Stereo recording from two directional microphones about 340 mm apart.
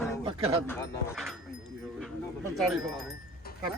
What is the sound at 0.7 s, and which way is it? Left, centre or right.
Speech, centre.